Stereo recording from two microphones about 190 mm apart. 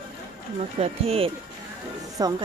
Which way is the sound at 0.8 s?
30° right (ahead or behind).